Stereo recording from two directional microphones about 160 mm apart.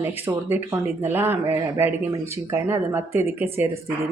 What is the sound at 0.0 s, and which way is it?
Speech, 15° right (ahead or behind).